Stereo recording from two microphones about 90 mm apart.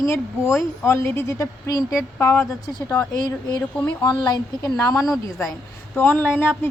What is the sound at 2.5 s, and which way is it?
Speech, 40° left (ahead or behind).